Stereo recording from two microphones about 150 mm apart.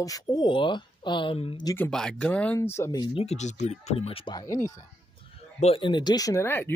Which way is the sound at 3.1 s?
50° left (ahead or behind).